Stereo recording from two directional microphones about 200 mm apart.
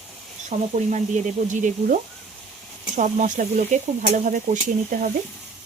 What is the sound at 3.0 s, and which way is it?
Stir, 40° right (ahead or behind).